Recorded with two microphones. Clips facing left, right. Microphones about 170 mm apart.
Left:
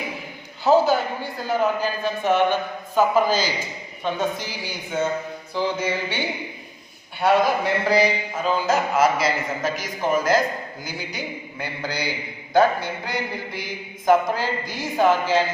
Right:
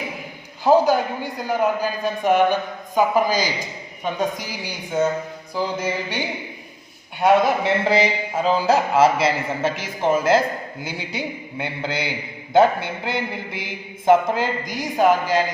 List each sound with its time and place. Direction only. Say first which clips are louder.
0.6 s a man's voice: right 2 dB; 15° right (ahead or behind)
7.2 s speech: right 2 dB; 20° right (ahead or behind)